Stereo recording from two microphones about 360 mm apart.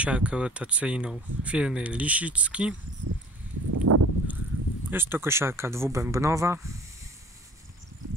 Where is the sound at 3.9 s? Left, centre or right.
Right.